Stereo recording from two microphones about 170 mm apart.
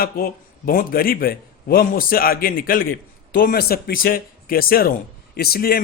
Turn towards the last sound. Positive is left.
turn(degrees=60)  # may be behind; listen again after turning